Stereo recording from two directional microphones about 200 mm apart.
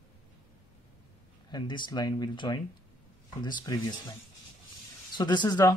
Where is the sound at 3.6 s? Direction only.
20° left (ahead or behind).